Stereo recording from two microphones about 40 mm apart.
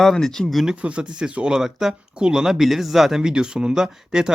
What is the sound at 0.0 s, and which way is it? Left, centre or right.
Speech, centre.